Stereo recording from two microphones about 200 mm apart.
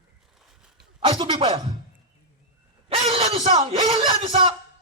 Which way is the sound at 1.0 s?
25° right (ahead or behind).